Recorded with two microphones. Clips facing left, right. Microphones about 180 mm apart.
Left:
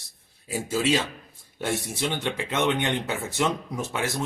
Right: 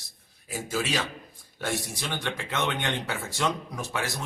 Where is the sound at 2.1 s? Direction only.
20° left (ahead or behind).